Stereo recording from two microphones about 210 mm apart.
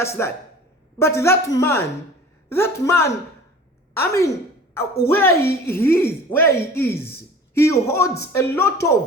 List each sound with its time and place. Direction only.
0.0 s speech: 10° left (ahead or behind)